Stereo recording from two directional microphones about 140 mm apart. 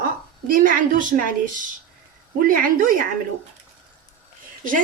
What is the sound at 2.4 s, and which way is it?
Speech, 85° right.